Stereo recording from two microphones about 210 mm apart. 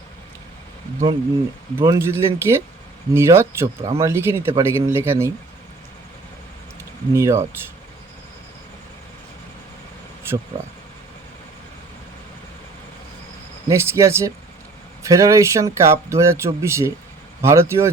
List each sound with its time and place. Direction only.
1.8 s speech: 15° right (ahead or behind)
7.1 s speech: 15° right (ahead or behind)
13.7 s speech: 15° right (ahead or behind)